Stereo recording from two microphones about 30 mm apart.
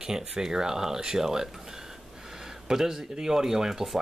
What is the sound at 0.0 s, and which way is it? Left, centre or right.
Speech, right.